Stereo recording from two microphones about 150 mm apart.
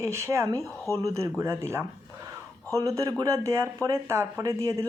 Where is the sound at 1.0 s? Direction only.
20° right (ahead or behind).